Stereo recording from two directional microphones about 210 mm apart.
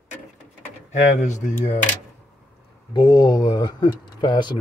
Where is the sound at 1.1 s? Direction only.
35° left (ahead or behind).